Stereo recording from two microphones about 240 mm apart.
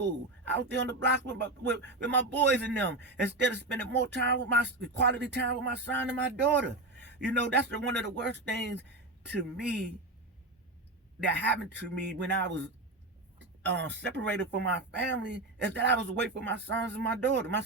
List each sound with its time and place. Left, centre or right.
0.0 s a man's voice: right
11.3 s a man's voice: right